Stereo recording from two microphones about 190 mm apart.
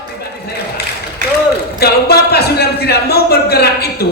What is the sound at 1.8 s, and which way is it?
A woman's voice, 55° left (ahead or behind).